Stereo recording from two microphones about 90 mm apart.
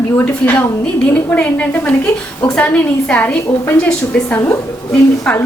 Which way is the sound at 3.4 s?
25° left (ahead or behind).